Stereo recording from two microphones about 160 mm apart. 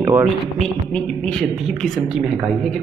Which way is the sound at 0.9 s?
5° left (ahead or behind).